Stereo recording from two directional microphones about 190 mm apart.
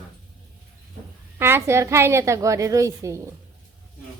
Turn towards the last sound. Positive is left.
turn(degrees=-15)  # may be behind; listen again after turning